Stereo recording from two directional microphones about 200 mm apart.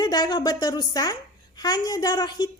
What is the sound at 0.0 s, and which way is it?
A woman's voice, 20° left (ahead or behind).